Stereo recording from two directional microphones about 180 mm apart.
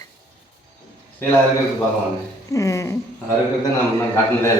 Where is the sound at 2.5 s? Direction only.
20° left (ahead or behind).